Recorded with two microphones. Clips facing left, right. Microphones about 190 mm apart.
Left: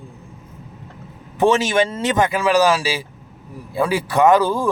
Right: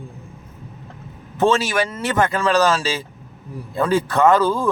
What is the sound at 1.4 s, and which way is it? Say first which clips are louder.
A man's voice: left 2 dB; 15° left (ahead or behind).